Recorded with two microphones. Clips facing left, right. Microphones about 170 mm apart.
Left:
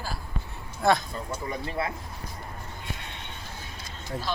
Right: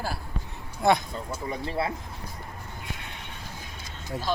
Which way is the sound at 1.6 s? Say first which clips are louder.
Right 4 dB; 30° right (ahead or behind).